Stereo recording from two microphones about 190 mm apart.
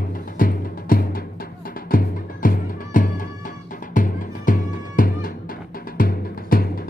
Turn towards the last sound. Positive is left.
turn(degrees=50)  # may be behind; listen again after turning